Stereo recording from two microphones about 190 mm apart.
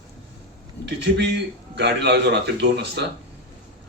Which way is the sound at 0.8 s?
65° right (ahead or behind).